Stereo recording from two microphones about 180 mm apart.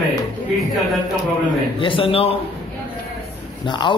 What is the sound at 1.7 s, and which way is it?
Speech, 30° left (ahead or behind).